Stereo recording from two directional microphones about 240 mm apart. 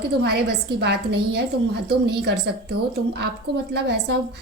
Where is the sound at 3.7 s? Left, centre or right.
Right.